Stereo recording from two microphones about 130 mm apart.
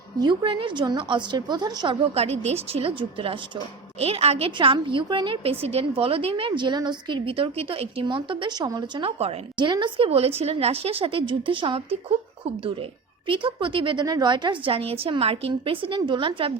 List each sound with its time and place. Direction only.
0.2 s a woman's voice: 35° right (ahead or behind)
2.1 s a woman's voice: 55° right (ahead or behind)
9.6 s a woman's voice: 35° right (ahead or behind)
10.1 s a woman's voice: 50° right (ahead or behind)
13.2 s a woman's voice: 40° right (ahead or behind)